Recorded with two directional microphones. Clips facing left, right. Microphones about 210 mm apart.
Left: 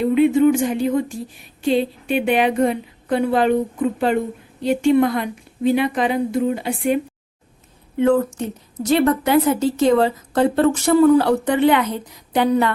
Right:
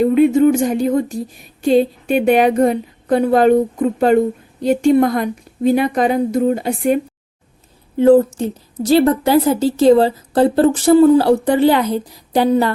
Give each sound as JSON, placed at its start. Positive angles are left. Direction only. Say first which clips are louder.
{"t": 0.0, "sound": "a woman's voice", "louder": "right 3 dB", "side_deg": -45}